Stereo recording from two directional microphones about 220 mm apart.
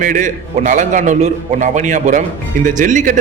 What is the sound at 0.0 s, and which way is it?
A man's voice, 35° right (ahead or behind).